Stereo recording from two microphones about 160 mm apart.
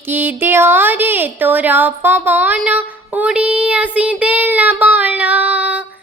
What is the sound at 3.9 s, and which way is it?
Child singing, 10° right (ahead or behind).